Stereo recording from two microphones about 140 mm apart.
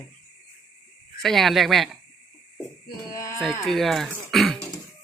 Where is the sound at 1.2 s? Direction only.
Centre (ahead or behind).